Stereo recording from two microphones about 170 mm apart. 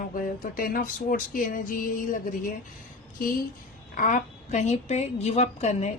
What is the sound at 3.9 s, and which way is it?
A woman's voice, 50° left (ahead or behind).